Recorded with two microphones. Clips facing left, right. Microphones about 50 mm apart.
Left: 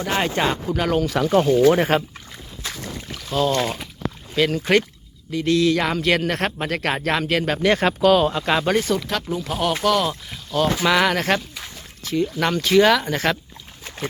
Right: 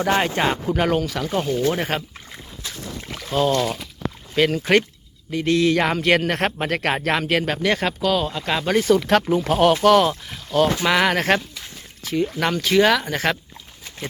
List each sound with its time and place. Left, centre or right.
0.0 s speech: centre
0.4 s speech: centre
1.4 s speech: centre
3.2 s speech: right
3.6 s speech: left
4.4 s speech: centre
5.3 s speech: right; by 7.9 s centre
8.0 s speech: left
8.8 s speech: right; by 13.1 s centre